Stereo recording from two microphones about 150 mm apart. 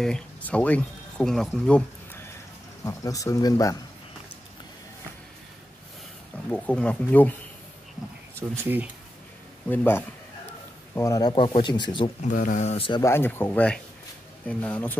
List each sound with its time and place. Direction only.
0.0 s speech: 5° left (ahead or behind)
2.8 s speech: 20° left (ahead or behind)
6.3 s speech: 10° left (ahead or behind)
8.4 s speech: 15° right (ahead or behind)
9.7 s speech: 15° left (ahead or behind)
11.3 s speech: 35° left (ahead or behind)
12.2 s speech: 55° left (ahead or behind); by 13.0 s 40° left (ahead or behind)
13.0 s speech: 15° left (ahead or behind)